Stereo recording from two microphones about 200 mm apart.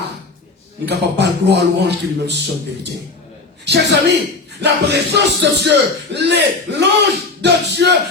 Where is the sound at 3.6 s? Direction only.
55° right (ahead or behind).